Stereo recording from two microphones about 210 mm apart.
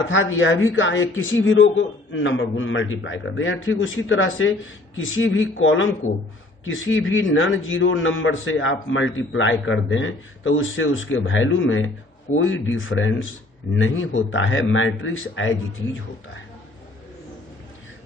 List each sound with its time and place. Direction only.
0.1 s a woman's voice: 65° left (ahead or behind)